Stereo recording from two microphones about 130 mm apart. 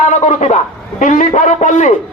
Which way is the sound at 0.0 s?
65° left (ahead or behind).